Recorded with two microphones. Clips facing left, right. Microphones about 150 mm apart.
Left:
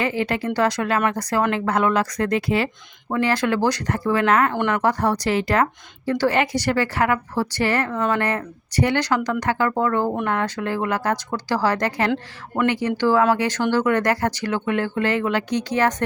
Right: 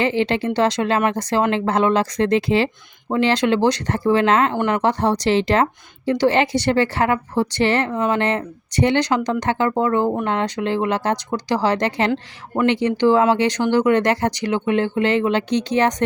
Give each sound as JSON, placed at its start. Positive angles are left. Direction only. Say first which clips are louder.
{"t": 0.0, "sound": "a woman's voice", "louder": "right 4 dB", "side_deg": -25}